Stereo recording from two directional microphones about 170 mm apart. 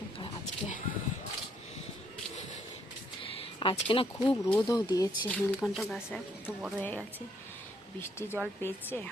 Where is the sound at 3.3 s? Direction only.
30° left (ahead or behind).